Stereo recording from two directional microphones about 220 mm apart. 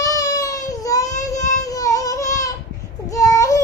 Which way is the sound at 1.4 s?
30° left (ahead or behind).